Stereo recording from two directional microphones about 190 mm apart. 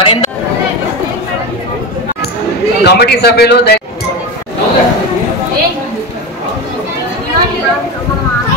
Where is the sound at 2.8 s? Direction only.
60° left (ahead or behind).